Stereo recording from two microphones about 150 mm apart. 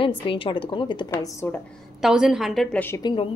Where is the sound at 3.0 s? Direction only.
30° left (ahead or behind).